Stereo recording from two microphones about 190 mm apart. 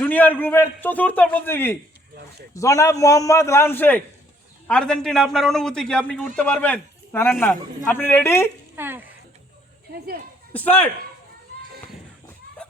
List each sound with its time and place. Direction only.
0.0 s a man's voice: 10° left (ahead or behind)
8.7 s a sound: 10° right (ahead or behind)
9.9 s speech: 55° right (ahead or behind)
10.5 s a man's voice: 10° left (ahead or behind)